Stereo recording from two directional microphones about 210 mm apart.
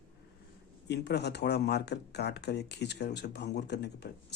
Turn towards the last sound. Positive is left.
turn(degrees=55)  # may be behind; listen again after turning